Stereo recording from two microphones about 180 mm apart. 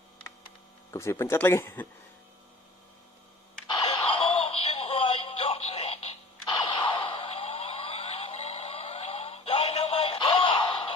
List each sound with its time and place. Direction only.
0.9 s speech: 15° left (ahead or behind)
3.8 s music: 30° left (ahead or behind)
6.6 s a sound: 25° left (ahead or behind)